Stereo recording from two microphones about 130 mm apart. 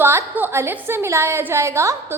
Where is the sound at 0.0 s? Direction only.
20° right (ahead or behind).